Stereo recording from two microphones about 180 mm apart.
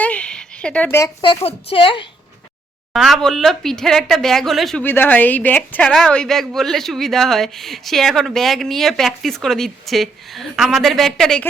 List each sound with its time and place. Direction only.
0.0 s a sound: 5° left (ahead or behind)
1.5 s a woman's voice: 30° left (ahead or behind)
2.9 s a woman's voice: centre (ahead or behind)